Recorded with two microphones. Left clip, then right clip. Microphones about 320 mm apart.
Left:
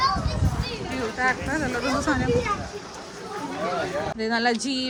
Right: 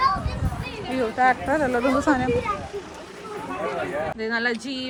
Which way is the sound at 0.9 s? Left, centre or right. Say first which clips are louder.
Right 5 dB; centre.